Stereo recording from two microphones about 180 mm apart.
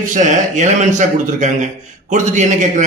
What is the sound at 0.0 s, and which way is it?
A man's voice, 45° right (ahead or behind).